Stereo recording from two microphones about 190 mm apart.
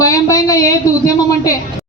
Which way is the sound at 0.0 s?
15° left (ahead or behind).